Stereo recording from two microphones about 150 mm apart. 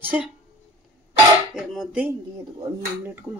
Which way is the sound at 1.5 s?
5° right (ahead or behind).